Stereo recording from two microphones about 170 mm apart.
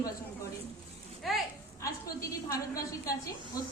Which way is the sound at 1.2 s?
Centre (ahead or behind).